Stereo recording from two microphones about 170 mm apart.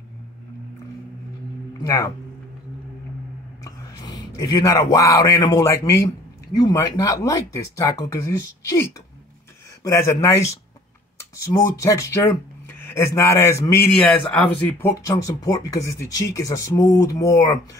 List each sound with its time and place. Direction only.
1.8 s speech: 20° left (ahead or behind)
3.6 s whispering: 20° left (ahead or behind)
4.9 s speech: 20° left (ahead or behind)
15.0 s speech: 20° left (ahead or behind)